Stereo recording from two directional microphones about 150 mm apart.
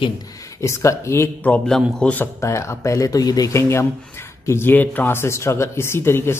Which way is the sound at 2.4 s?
20° left (ahead or behind).